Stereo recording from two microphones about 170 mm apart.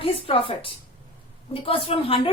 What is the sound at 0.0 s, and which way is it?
A woman's voice, 30° left (ahead or behind).